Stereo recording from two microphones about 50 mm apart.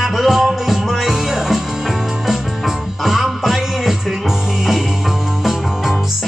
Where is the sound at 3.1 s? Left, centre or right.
Centre.